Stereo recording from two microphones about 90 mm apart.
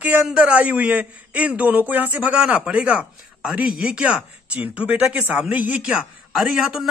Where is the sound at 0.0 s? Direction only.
10° right (ahead or behind).